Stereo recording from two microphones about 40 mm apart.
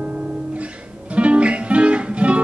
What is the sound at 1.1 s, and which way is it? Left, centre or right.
Music, right.